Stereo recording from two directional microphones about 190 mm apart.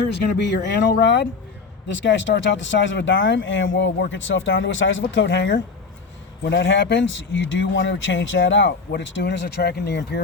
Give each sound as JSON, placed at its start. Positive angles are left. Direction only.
{"t": 0.1, "sound": "speech", "side_deg": 65}